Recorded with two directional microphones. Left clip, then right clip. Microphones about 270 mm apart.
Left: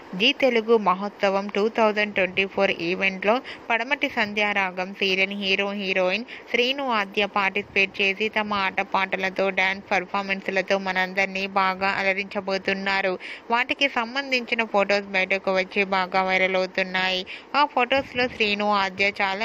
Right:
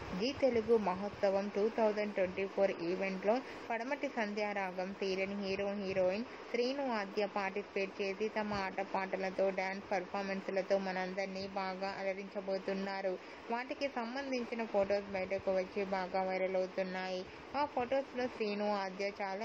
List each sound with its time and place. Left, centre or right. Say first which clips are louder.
0.4 s speech: left 7 dB; left